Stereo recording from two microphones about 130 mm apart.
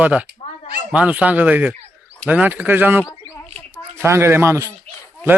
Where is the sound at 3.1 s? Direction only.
25° left (ahead or behind).